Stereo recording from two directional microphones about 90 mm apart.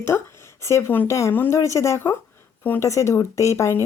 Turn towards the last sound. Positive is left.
turn(degrees=35)  # may be behind; listen again after turning